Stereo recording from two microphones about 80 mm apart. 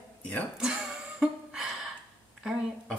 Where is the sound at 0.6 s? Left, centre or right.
Centre.